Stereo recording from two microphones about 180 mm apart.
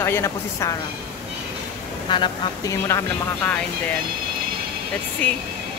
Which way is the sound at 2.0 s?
25° left (ahead or behind).